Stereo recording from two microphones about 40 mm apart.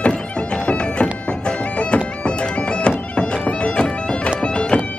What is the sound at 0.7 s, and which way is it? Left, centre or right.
Bagpipes, left.